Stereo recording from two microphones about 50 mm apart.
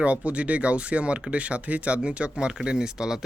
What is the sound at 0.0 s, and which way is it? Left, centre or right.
Speech, right.